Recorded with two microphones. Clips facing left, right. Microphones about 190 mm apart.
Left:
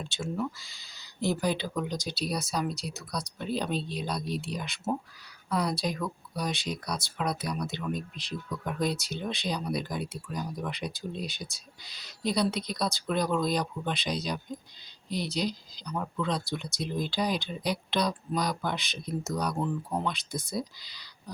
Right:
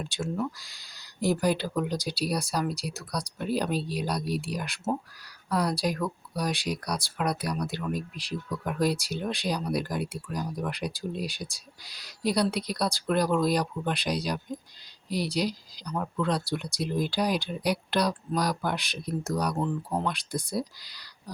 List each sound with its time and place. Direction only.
0.0 s speech: 5° right (ahead or behind)
20.3 s speech: 35° right (ahead or behind)